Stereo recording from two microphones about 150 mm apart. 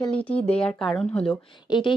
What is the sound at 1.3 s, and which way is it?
Speech, 30° left (ahead or behind).